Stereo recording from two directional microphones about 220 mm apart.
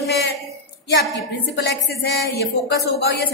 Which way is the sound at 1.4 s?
50° left (ahead or behind).